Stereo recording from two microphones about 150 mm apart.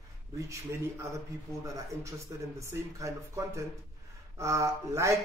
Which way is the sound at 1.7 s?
20° right (ahead or behind).